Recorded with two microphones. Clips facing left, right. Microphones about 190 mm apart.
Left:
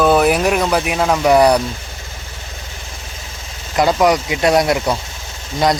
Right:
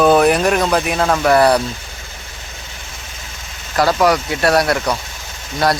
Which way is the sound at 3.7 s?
20° left (ahead or behind).